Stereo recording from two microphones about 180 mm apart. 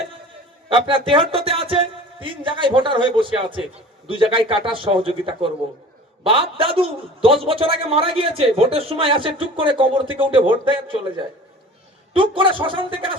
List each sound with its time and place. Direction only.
0.7 s a man's voice: 30° right (ahead or behind)
12.1 s a man's voice: 30° right (ahead or behind)